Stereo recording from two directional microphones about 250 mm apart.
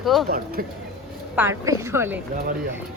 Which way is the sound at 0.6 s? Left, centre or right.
Right.